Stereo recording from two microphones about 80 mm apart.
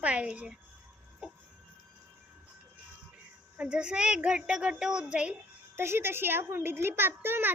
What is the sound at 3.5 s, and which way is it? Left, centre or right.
A woman's voice, centre.